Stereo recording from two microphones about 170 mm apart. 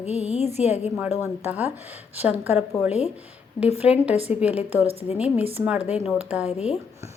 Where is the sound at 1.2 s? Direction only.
10° right (ahead or behind).